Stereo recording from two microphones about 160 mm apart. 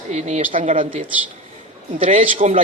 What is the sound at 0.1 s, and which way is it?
Speech, 45° right (ahead or behind).